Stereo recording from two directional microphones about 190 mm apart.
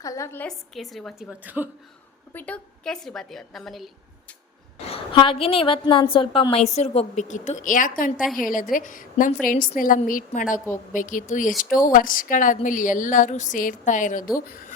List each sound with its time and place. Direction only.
0.0 s a woman's voice: 15° left (ahead or behind); by 3.8 s centre (ahead or behind)
4.9 s a woman's voice: 30° left (ahead or behind)